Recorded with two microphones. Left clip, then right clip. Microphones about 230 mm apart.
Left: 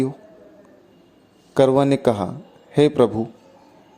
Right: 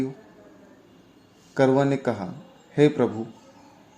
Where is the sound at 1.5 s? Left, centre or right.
Left.